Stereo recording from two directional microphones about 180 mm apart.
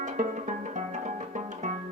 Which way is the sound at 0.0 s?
45° right (ahead or behind).